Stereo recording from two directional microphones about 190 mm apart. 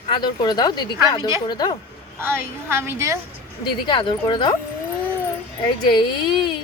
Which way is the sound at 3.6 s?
25° left (ahead or behind).